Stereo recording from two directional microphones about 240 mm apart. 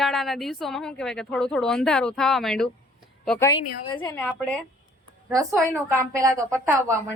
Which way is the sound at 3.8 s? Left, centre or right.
Centre.